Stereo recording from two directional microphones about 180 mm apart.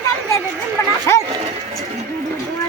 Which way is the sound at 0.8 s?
15° left (ahead or behind).